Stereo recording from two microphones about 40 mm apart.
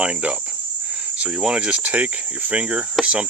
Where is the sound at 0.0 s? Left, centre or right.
Right.